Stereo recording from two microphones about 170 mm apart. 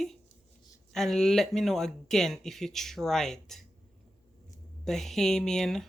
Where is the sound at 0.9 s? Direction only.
5° left (ahead or behind).